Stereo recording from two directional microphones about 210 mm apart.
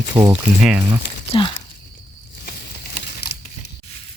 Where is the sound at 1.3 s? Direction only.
25° left (ahead or behind).